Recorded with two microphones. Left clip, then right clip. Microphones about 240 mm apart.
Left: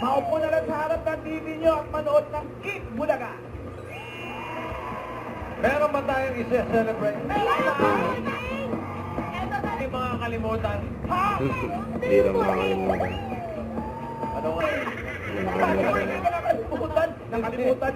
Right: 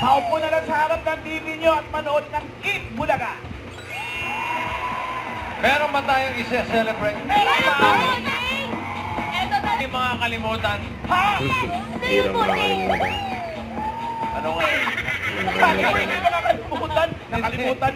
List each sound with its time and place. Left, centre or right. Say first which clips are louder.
0.0 s speech: right 5 dB; centre
5.6 s a man's voice: right 4 dB; centre
14.4 s speech: right 5 dB; centre